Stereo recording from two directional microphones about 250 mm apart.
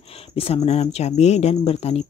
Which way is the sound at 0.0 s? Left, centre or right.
Left.